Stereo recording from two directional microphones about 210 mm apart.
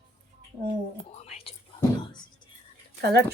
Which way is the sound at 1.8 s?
20° left (ahead or behind).